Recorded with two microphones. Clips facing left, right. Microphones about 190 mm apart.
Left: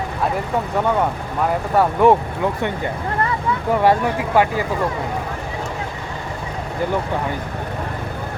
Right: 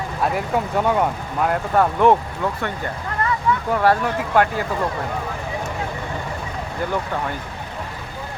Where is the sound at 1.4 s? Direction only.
5° left (ahead or behind).